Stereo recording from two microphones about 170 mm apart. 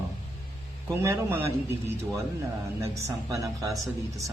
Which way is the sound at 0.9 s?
15° right (ahead or behind).